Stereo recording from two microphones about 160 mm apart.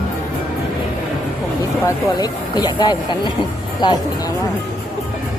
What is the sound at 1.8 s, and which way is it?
Speech, 25° left (ahead or behind).